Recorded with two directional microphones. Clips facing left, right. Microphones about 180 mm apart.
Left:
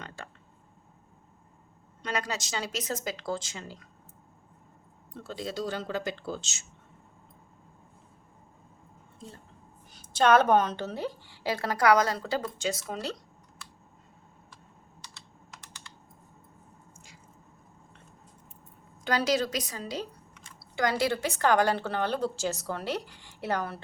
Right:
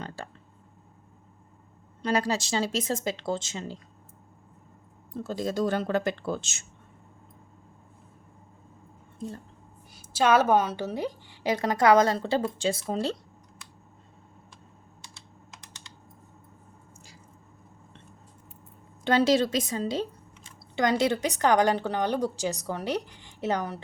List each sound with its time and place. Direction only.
2.0 s a woman's voice: 30° right (ahead or behind)
5.1 s speech: 40° right (ahead or behind)
9.9 s a woman's voice: 10° right (ahead or behind); by 13.1 s 30° right (ahead or behind)
19.0 s a woman's voice: 25° right (ahead or behind)